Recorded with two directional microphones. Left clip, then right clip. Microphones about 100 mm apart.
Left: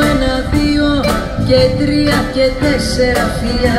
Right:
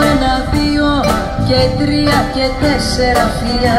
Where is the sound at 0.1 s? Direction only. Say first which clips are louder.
Right 1 dB; 30° right (ahead or behind).